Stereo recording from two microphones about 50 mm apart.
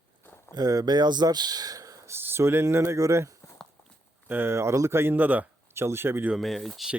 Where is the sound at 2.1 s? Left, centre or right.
Right.